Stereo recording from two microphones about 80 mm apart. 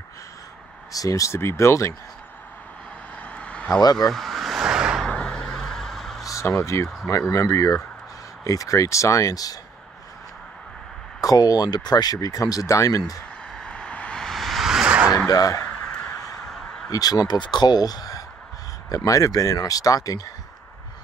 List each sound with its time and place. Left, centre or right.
0.9 s speech: left
3.2 s vehicle: centre
3.8 s speech: left
4.1 s vehicle: centre
5.0 s a sound: centre
6.2 s speech: left
11.1 s speech: left
13.5 s a sound: centre
14.9 s zipper: centre
15.2 s speech: left
15.7 s crow: centre
16.9 s speech: left
17.4 s speech: left